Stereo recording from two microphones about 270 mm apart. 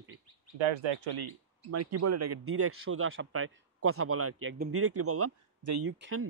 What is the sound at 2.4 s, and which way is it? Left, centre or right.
Speech, right.